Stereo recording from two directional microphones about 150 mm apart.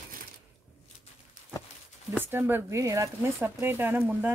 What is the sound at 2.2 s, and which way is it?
Speech, 15° right (ahead or behind).